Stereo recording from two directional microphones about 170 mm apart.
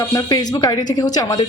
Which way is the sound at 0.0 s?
20° left (ahead or behind).